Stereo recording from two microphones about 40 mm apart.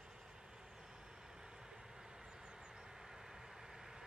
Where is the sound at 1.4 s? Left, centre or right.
Centre.